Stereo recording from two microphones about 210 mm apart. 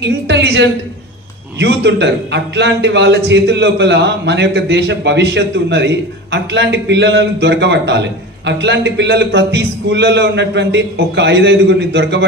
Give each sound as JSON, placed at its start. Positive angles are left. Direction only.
{"t": 0.0, "sound": "a man's voice", "side_deg": -55}